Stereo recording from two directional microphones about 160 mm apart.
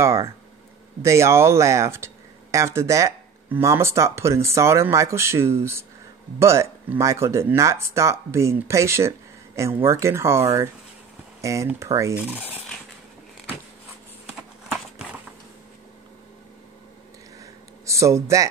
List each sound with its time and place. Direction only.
0.0 s speech: 15° right (ahead or behind)
11.4 s speech: 20° right (ahead or behind)
17.4 s a sound: 20° right (ahead or behind)